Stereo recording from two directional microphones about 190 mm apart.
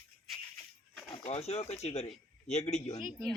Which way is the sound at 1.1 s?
35° left (ahead or behind).